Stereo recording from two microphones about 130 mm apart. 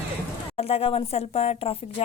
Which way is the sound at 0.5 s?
50° left (ahead or behind).